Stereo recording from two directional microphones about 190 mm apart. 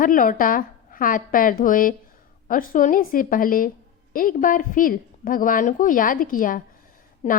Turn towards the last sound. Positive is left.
turn(degrees=40)  # may be behind; listen again after turning